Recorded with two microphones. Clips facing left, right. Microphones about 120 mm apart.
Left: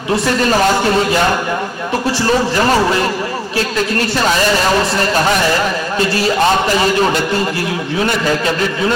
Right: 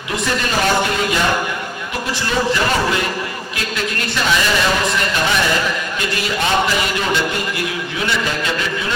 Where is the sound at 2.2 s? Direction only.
35° left (ahead or behind).